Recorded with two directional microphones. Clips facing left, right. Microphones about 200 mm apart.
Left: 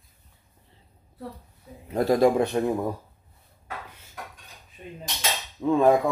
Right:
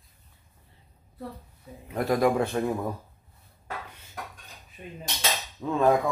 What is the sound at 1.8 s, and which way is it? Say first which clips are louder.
Speech: left 4 dB; 30° left (ahead or behind).